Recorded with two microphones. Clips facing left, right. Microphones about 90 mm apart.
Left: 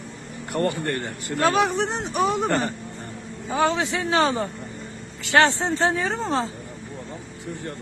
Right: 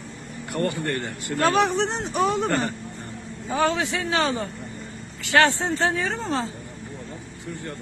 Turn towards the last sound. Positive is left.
turn(degrees=30)  # may be behind; listen again after turning